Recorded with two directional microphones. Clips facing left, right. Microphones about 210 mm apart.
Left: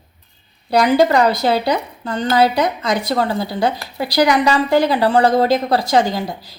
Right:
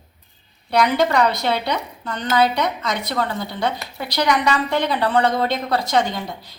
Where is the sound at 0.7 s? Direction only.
35° left (ahead or behind).